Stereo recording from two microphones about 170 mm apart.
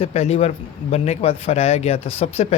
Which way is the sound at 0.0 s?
35° left (ahead or behind).